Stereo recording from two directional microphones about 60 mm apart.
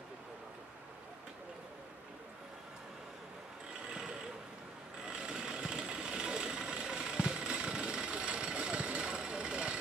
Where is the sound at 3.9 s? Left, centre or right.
Centre.